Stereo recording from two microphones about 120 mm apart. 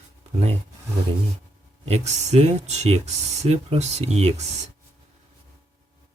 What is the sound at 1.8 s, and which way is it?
Speech, 65° right (ahead or behind).